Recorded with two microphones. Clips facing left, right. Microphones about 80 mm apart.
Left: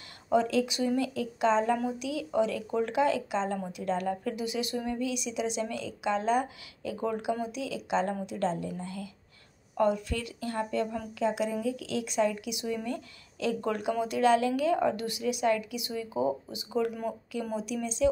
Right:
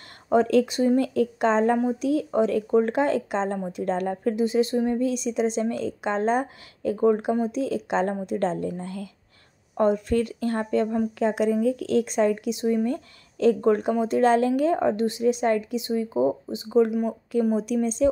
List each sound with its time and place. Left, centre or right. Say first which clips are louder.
0.3 s speech: right 6 dB; right